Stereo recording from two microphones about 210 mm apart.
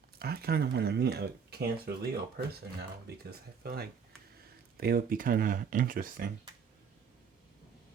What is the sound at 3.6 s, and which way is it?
Speech, 45° right (ahead or behind).